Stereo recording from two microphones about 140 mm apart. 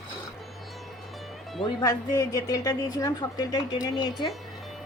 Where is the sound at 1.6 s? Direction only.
30° left (ahead or behind).